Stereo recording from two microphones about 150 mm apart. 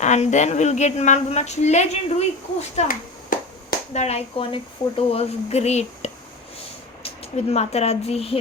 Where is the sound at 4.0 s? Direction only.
45° left (ahead or behind).